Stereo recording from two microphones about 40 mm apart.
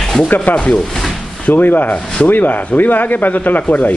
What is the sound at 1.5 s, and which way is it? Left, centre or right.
Speech, left.